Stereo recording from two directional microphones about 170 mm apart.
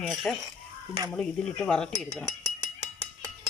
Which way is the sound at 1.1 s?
5° left (ahead or behind).